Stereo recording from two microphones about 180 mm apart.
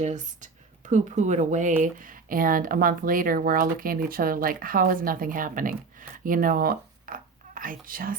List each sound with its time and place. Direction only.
0.0 s speech: 45° right (ahead or behind)